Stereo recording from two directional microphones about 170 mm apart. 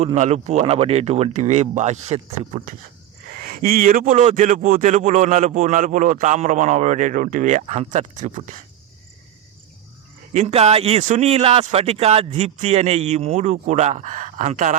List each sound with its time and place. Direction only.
0.0 s speech: 40° right (ahead or behind)
3.3 s speech: 60° right (ahead or behind)
4.1 s speech: 45° right (ahead or behind)
10.3 s speech: 40° right (ahead or behind)